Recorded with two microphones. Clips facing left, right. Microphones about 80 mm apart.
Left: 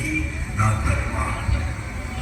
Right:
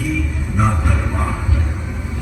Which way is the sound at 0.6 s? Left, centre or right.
Right.